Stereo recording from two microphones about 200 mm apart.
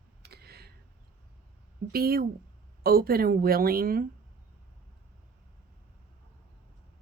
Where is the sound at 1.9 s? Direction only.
50° right (ahead or behind).